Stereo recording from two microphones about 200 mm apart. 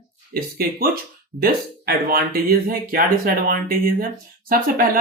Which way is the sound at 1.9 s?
50° right (ahead or behind).